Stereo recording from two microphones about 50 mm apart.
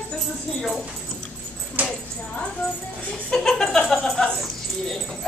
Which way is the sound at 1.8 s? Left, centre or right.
Right.